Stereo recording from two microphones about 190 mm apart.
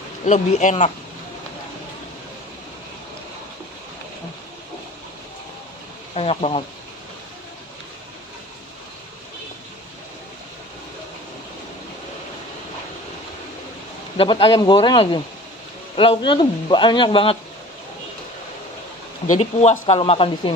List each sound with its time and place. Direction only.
0.2 s speech: 40° left (ahead or behind)
6.1 s speech: 30° left (ahead or behind)
14.1 s speech: 30° left (ahead or behind)
19.2 s speech: 40° left (ahead or behind)